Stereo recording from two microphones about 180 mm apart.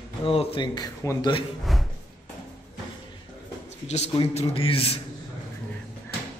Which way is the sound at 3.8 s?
40° left (ahead or behind).